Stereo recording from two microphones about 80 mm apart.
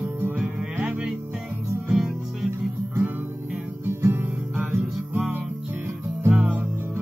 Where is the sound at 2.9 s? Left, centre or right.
Right.